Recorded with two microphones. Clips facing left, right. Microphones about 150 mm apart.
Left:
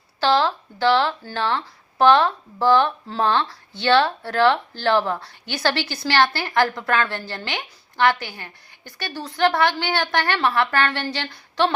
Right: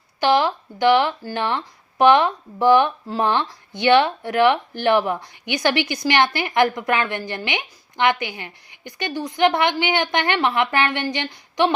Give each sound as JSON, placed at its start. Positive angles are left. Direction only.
{"t": 0.2, "sound": "a woman's voice", "side_deg": -15}